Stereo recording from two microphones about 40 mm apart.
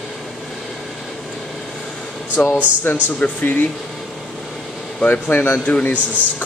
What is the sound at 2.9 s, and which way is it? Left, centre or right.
Speech, left.